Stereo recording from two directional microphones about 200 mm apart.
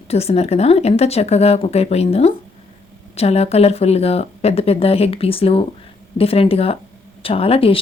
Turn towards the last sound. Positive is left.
turn(degrees=30)  # may be behind; listen again after turning